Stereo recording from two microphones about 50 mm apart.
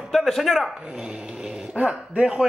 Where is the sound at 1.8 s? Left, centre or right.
Right.